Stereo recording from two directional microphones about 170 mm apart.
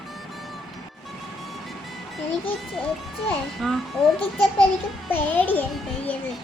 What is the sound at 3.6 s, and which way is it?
Speech, centre (ahead or behind).